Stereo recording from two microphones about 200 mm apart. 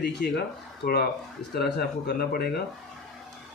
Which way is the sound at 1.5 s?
55° left (ahead or behind).